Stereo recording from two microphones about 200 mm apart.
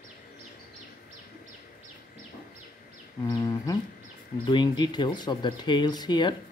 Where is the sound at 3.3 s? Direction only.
20° left (ahead or behind).